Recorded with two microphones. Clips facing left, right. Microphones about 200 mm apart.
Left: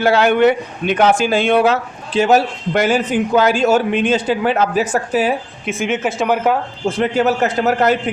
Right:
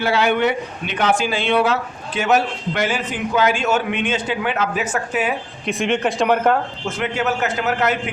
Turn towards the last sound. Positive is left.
turn(degrees=35)  # may be behind; listen again after turning